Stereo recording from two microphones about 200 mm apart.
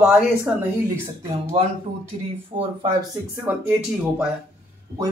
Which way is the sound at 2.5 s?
30° right (ahead or behind).